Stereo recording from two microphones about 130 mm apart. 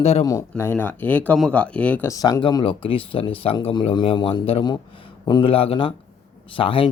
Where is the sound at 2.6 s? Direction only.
45° left (ahead or behind).